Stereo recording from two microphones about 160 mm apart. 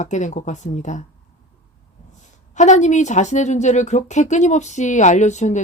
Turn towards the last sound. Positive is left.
turn(degrees=50)  # may be behind; listen again after turning